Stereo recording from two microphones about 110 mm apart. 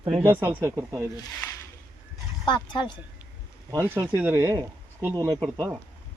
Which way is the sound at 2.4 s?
45° left (ahead or behind).